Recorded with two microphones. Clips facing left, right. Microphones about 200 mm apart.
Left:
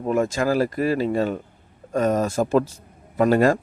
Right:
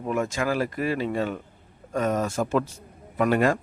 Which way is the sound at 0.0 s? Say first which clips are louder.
Left 5 dB; 35° left (ahead or behind).